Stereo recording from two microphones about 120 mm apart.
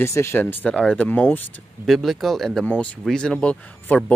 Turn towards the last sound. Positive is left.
turn(degrees=10)  # may be behind; listen again after turning